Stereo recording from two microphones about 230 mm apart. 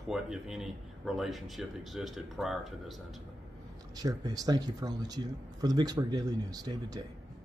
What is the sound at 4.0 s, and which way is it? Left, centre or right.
A man's voice, centre.